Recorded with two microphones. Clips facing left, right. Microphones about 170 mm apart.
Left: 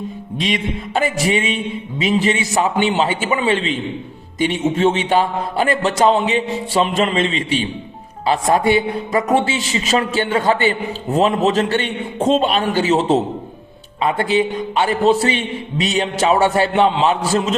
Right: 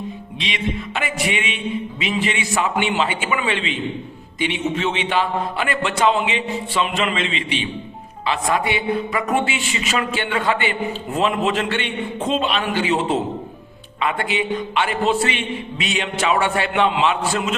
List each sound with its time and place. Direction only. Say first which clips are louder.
0.3 s a man's voice: left 4 dB; 45° left (ahead or behind)